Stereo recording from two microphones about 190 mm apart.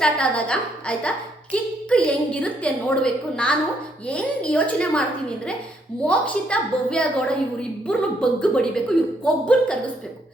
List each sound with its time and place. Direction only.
0.0 s a woman's voice: 5° left (ahead or behind)
6.1 s a woman's voice: 5° left (ahead or behind)